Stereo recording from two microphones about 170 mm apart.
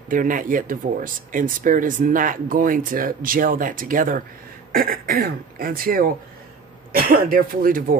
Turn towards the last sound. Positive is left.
turn(degrees=-55)  # may be behind; listen again after turning